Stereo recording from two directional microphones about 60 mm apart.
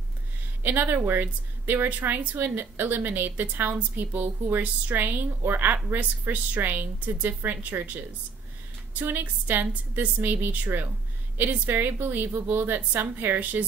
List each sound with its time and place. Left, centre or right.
0.7 s a woman's voice: right